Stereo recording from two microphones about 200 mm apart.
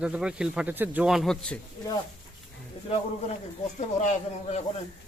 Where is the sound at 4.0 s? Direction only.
35° left (ahead or behind).